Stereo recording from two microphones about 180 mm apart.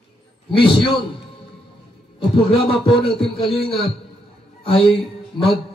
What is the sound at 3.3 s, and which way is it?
Speech, 30° left (ahead or behind).